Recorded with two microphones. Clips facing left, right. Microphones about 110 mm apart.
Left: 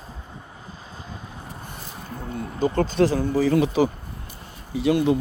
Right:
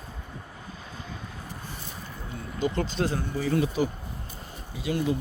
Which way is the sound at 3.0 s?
90° left.